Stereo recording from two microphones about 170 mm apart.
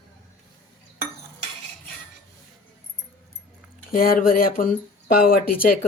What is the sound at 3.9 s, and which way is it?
Speech, 55° left (ahead or behind).